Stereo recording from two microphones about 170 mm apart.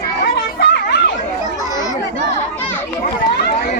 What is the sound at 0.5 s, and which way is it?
Chatter, 90° left.